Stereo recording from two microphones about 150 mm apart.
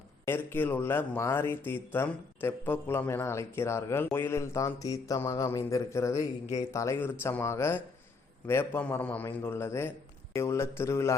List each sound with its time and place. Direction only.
0.3 s speech: 15° left (ahead or behind)